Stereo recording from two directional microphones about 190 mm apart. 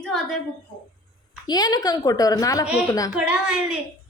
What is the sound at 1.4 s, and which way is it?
A woman's voice, 20° left (ahead or behind).